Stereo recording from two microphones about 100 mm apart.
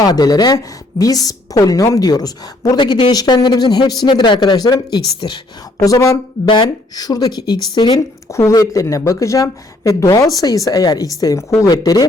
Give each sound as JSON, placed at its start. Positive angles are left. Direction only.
{"t": 0.0, "sound": "a woman's voice", "side_deg": 40}
{"t": 6.5, "sound": "a woman's voice", "side_deg": 45}
{"t": 8.3, "sound": "speech", "side_deg": 30}